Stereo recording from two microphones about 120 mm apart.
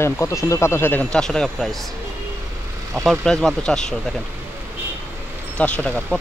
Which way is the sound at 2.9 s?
Centre (ahead or behind).